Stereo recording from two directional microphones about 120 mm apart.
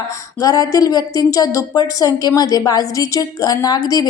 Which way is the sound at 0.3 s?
30° left (ahead or behind).